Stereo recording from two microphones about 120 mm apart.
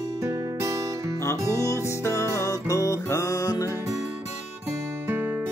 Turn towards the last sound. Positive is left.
turn(degrees=-15)  # may be behind; listen again after turning